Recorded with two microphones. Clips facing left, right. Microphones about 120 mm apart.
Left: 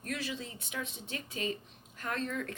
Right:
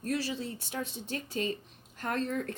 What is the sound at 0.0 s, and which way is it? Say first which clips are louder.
A woman's voice: right 5 dB; 35° right (ahead or behind).